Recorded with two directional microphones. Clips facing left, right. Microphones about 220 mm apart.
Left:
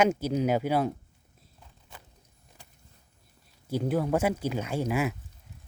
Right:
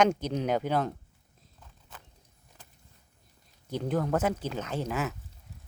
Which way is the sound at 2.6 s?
10° left (ahead or behind).